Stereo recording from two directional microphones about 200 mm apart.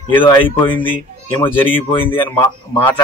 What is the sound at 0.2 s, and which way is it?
Speech, 25° left (ahead or behind).